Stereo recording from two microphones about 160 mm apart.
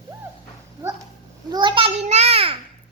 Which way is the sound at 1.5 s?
30° right (ahead or behind).